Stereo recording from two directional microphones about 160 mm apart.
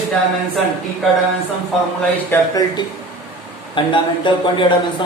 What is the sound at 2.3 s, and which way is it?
Speech, 20° left (ahead or behind).